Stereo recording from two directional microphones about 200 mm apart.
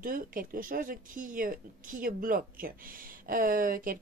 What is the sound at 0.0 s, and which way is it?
Speech, 45° right (ahead or behind).